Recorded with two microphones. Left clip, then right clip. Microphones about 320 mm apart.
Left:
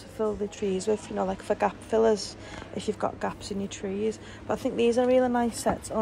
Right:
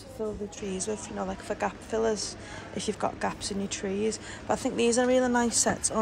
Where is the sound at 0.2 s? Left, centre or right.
Centre.